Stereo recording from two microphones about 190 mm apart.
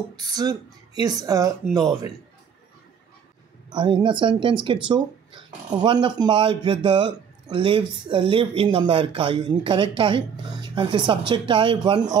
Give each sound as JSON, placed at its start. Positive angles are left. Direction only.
{"t": 0.1, "sound": "speech", "side_deg": -20}
{"t": 3.7, "sound": "speech", "side_deg": -25}